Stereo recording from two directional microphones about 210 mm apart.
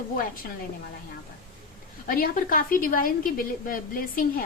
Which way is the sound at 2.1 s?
40° left (ahead or behind).